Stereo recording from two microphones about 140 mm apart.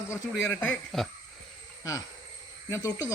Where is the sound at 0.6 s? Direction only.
5° left (ahead or behind).